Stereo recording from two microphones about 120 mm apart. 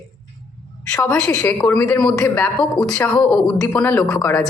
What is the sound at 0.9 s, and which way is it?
A woman's voice, 10° left (ahead or behind).